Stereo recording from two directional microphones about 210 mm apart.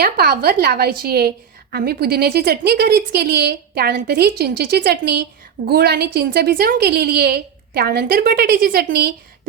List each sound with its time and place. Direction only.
0.0 s a woman's voice: 50° right (ahead or behind)